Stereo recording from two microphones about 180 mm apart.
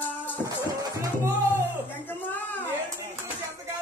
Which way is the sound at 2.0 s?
10° left (ahead or behind).